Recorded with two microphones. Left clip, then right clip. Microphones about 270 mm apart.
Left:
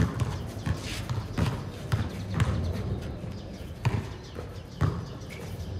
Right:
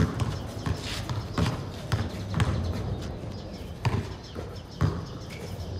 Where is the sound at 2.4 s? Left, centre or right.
Right.